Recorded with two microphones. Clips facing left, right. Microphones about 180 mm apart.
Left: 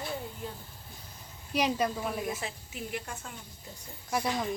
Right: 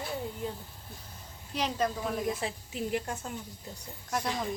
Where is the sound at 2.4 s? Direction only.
35° right (ahead or behind).